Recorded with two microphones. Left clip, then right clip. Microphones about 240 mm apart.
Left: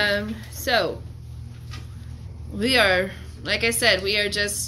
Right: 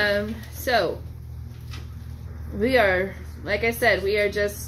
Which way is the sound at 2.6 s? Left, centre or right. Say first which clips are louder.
Left 1 dB; left.